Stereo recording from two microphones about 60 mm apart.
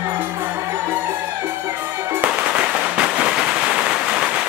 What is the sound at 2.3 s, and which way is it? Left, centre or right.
Firecracker, centre.